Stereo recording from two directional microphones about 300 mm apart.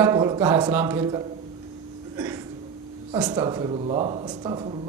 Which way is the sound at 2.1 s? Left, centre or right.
Centre.